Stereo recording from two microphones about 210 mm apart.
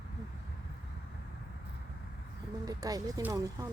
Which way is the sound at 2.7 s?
15° right (ahead or behind).